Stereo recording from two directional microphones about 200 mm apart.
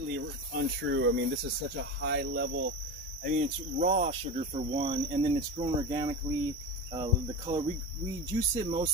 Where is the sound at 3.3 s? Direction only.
40° right (ahead or behind); by 6.1 s 20° right (ahead or behind).